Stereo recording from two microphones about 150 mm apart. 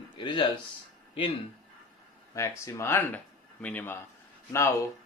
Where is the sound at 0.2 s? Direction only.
30° left (ahead or behind).